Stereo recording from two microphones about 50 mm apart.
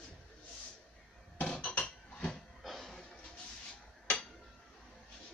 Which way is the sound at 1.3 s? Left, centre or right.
Left.